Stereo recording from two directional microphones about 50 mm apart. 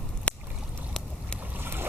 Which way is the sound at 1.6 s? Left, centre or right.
Right.